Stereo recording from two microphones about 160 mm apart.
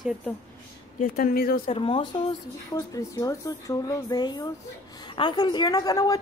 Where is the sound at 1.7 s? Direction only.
35° left (ahead or behind).